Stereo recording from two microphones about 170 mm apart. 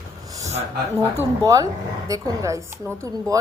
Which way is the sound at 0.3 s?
20° right (ahead or behind).